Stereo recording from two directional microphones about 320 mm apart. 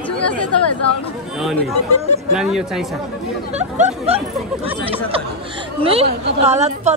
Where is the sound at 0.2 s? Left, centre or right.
Left.